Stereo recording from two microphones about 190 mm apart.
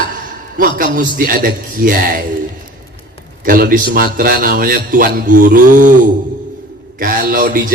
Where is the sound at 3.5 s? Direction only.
50° right (ahead or behind).